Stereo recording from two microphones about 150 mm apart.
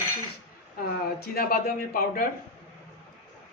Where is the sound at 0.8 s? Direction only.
85° left.